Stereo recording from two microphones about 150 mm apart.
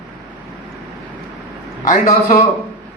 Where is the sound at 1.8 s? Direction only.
60° left (ahead or behind).